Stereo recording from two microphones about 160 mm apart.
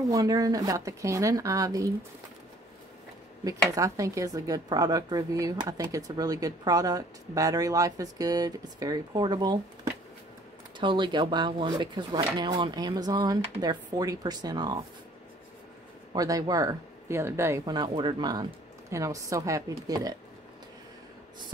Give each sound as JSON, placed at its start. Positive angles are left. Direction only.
{"t": 0.1, "sound": "speech", "side_deg": -25}
{"t": 3.4, "sound": "speech", "side_deg": -20}
{"t": 10.8, "sound": "speech", "side_deg": -30}
{"t": 16.2, "sound": "speech", "side_deg": -25}